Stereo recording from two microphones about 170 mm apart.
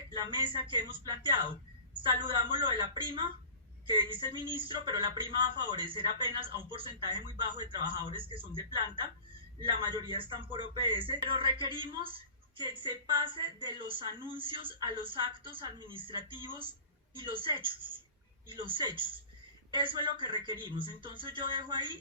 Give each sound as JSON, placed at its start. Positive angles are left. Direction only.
{"t": 0.2, "sound": "a man's voice", "side_deg": -30}